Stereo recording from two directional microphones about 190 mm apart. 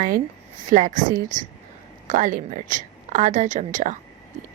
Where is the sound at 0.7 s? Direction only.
40° right (ahead or behind).